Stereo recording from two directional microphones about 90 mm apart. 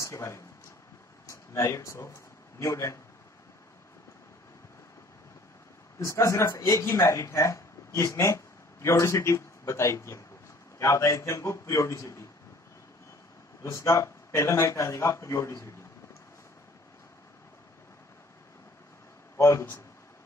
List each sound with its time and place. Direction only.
0.0 s a man's voice: 30° left (ahead or behind)
5.9 s a man's voice: 35° left (ahead or behind)
13.6 s a man's voice: 35° left (ahead or behind)
19.3 s a man's voice: 30° left (ahead or behind)